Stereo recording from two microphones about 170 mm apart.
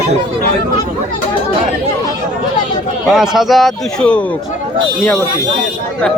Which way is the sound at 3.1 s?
Centre (ahead or behind).